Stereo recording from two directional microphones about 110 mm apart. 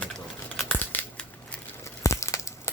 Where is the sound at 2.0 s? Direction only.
30° left (ahead or behind).